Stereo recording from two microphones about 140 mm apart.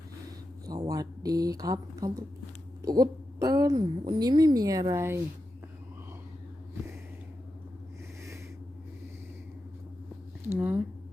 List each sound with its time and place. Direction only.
0.7 s a woman's voice: 25° right (ahead or behind)
10.4 s speech: 15° right (ahead or behind)